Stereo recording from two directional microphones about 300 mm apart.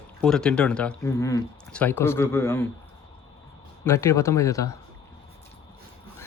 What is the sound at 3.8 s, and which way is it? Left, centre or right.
Speech, centre.